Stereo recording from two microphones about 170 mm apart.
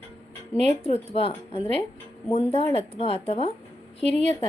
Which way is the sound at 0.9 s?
35° left (ahead or behind).